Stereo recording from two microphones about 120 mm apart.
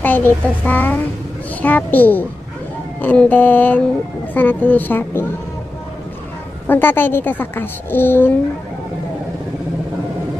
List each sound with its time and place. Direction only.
0.0 s a woman's voice: 15° left (ahead or behind)
6.7 s a woman's voice: 15° left (ahead or behind)